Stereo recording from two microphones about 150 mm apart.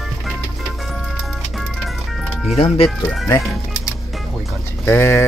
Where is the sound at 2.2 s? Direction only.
Centre (ahead or behind).